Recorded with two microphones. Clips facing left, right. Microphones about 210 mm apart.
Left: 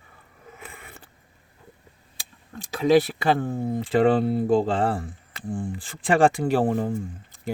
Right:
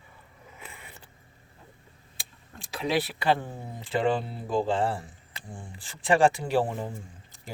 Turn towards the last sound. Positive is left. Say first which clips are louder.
# left 12 dB
turn(degrees=55)  # may be behind; listen again after turning